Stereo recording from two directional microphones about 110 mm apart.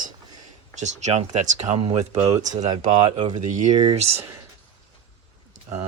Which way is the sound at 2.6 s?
90° right.